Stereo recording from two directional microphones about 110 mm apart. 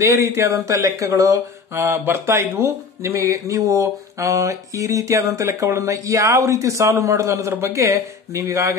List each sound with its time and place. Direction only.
0.0 s mantra: 25° right (ahead or behind)